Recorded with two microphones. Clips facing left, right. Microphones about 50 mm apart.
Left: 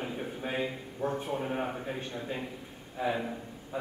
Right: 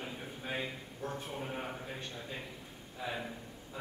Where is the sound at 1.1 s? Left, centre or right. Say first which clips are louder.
Left 6 dB; left.